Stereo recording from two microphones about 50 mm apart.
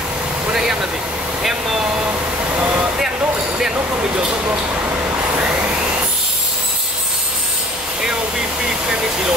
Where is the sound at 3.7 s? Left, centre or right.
Right.